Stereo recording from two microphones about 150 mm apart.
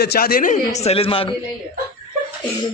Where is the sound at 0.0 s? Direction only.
85° left.